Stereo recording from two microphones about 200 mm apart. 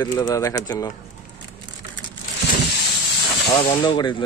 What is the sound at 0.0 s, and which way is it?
Speech, 20° left (ahead or behind).